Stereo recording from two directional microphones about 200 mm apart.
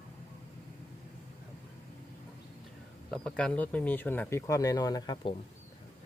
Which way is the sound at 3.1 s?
5° left (ahead or behind).